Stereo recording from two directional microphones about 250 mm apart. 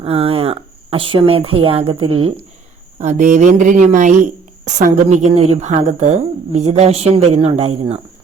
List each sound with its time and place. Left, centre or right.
0.0 s a woman's voice: right